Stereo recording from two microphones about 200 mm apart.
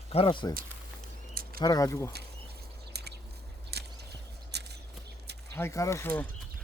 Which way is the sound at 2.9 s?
55° right (ahead or behind).